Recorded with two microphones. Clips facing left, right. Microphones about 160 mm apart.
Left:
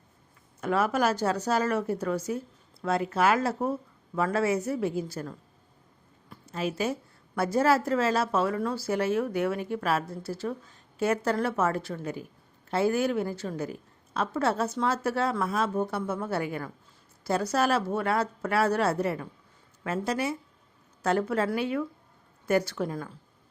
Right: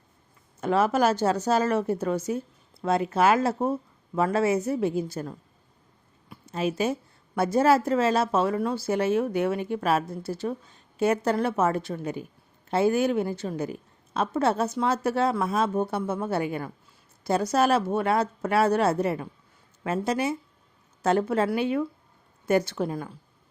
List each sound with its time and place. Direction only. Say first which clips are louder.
0.6 s speech: right 3 dB; 25° right (ahead or behind)
6.2 s a sound: right 4 dB; 15° right (ahead or behind)
7.3 s speech: right 3 dB; 20° right (ahead or behind)